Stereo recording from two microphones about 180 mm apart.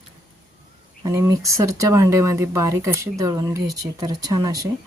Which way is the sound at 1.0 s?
20° right (ahead or behind).